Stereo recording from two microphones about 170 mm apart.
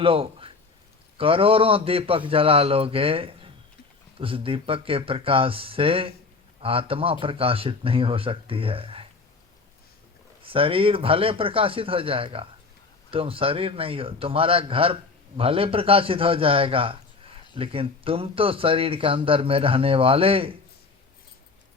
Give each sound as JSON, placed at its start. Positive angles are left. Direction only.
{"t": 0.0, "sound": "a sound", "side_deg": -30}
{"t": 1.2, "sound": "speech", "side_deg": -35}
{"t": 10.4, "sound": "speech", "side_deg": -30}